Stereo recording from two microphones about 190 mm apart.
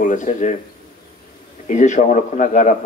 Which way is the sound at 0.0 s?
40° left (ahead or behind).